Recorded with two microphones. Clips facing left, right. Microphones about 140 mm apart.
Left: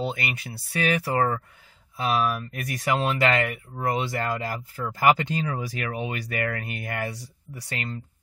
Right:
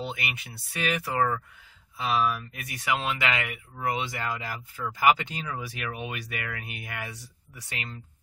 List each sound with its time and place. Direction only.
0.0 s speech: 40° left (ahead or behind)
2.0 s speech: 50° left (ahead or behind)